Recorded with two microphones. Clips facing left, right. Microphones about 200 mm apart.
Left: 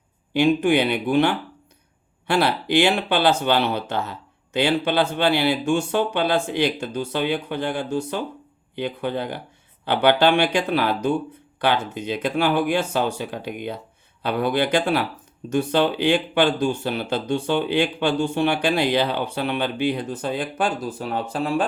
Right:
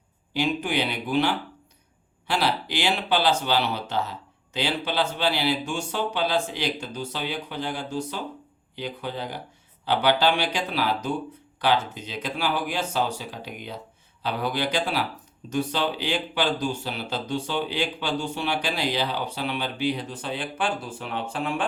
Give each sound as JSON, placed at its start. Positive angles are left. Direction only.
{"t": 0.3, "sound": "speech", "side_deg": 55}